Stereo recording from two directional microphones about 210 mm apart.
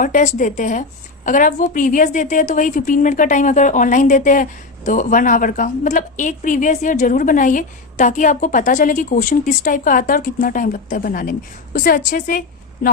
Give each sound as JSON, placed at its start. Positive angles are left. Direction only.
{"t": 0.0, "sound": "a woman's voice", "side_deg": 40}